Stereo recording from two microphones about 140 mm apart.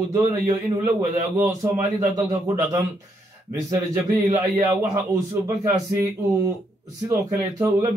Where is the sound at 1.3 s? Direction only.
25° right (ahead or behind).